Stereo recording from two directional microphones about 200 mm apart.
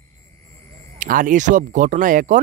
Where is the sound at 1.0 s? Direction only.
40° right (ahead or behind).